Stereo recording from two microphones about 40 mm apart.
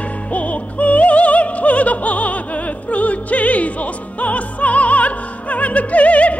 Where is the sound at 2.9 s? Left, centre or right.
Left.